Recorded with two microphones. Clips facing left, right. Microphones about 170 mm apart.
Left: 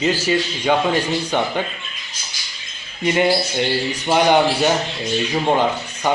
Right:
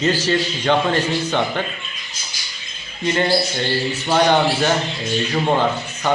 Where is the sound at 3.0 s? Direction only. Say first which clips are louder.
Left 1 dB; 15° left (ahead or behind).